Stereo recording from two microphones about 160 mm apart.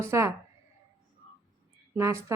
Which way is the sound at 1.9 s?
20° right (ahead or behind).